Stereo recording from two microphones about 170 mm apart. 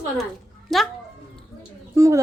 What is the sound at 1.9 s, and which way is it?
Speech, 20° right (ahead or behind).